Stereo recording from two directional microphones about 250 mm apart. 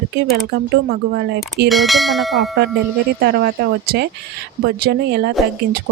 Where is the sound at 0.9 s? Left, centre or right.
Right.